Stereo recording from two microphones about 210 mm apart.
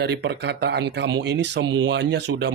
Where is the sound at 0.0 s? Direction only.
55° right (ahead or behind).